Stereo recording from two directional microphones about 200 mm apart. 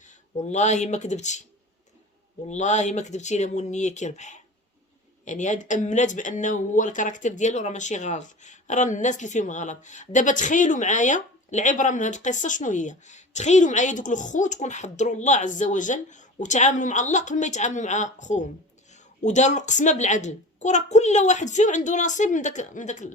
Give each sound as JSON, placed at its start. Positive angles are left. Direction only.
{"t": 0.0, "sound": "speech", "side_deg": 40}
{"t": 2.5, "sound": "speech", "side_deg": 35}